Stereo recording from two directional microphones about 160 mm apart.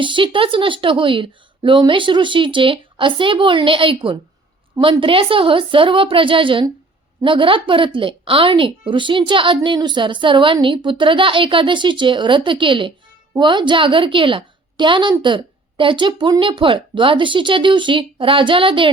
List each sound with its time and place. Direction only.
0.0 s a woman's voice: 30° right (ahead or behind)